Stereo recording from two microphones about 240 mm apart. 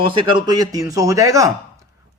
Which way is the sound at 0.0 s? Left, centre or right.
Centre.